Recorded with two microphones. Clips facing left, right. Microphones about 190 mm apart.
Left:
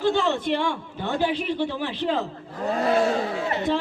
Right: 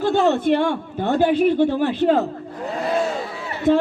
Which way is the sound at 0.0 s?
45° right (ahead or behind).